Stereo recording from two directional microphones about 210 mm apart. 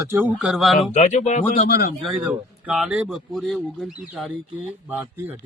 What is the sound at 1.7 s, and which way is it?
Speech, 45° left (ahead or behind).